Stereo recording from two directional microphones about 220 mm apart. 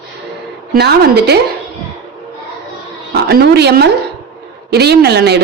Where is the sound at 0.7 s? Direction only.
50° right (ahead or behind).